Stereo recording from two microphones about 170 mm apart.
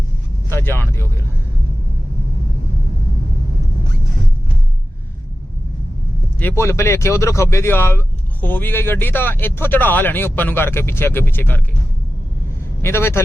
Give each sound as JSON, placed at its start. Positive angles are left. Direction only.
{"t": 0.5, "sound": "speech", "side_deg": 15}
{"t": 6.6, "sound": "speech", "side_deg": 15}
{"t": 12.8, "sound": "speech", "side_deg": 15}